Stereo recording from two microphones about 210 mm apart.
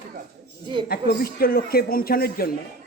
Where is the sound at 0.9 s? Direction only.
45° left (ahead or behind).